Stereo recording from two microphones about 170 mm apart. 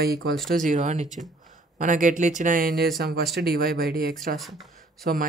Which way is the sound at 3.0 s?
65° right (ahead or behind).